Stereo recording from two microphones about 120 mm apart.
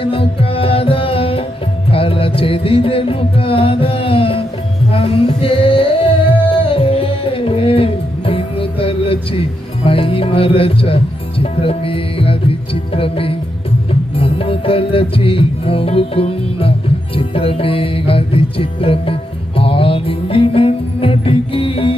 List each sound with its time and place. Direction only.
0.0 s music: 50° left (ahead or behind)